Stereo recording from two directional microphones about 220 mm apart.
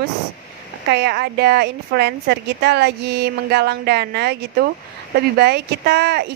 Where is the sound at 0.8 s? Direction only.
50° right (ahead or behind).